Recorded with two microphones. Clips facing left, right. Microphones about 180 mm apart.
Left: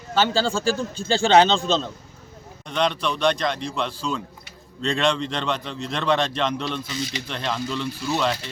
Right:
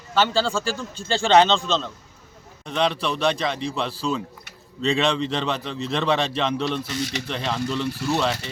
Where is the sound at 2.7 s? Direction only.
Centre (ahead or behind).